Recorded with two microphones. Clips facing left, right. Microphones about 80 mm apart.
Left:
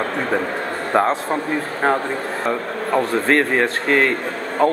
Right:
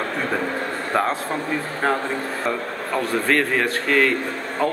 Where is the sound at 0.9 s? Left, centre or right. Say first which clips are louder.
Left 5 dB; left.